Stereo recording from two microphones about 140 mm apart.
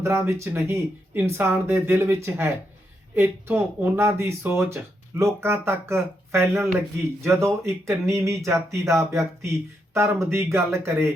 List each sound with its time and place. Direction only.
0.0 s speech: 20° right (ahead or behind)